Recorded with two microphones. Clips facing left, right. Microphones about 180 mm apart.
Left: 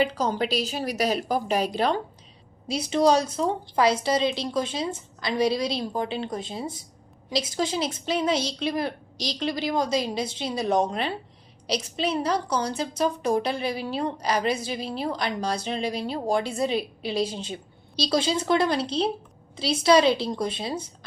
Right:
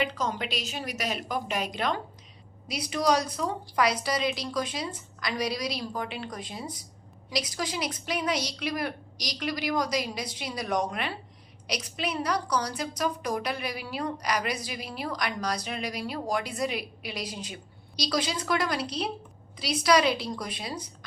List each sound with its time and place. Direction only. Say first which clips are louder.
0.0 s a woman's voice: left 6 dB; 35° left (ahead or behind)